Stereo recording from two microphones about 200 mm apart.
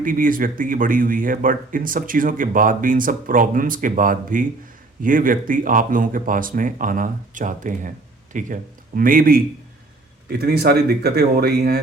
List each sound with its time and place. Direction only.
0.0 s speech: 45° right (ahead or behind)